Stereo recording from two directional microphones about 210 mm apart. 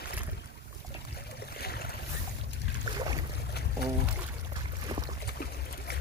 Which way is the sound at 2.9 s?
20° right (ahead or behind).